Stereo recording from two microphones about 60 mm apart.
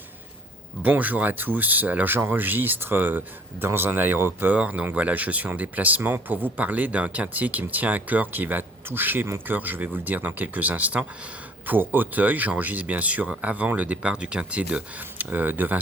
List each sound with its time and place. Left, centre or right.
0.8 s speech: right
4.5 s speech: right
14.9 s speech: right